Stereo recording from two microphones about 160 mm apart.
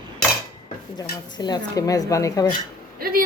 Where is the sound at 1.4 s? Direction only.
25° left (ahead or behind).